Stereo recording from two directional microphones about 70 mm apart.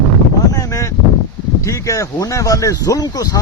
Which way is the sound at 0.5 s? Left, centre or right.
Left.